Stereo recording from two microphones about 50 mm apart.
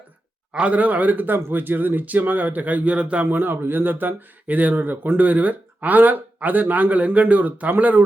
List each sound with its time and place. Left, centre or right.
0.5 s speech: right
3.3 s speech: right